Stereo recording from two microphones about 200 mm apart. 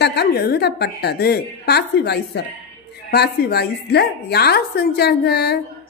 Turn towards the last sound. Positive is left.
turn(degrees=55)  # may be behind; listen again after turning